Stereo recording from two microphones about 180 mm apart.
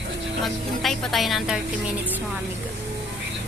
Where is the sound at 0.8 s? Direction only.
Centre (ahead or behind).